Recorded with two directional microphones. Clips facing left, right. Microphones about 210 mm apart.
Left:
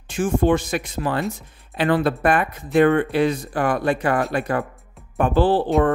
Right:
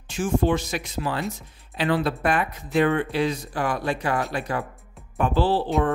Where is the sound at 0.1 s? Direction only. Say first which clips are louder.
Left 4 dB; 55° left (ahead or behind).